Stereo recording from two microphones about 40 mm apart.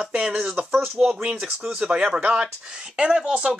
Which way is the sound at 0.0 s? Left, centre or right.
Right.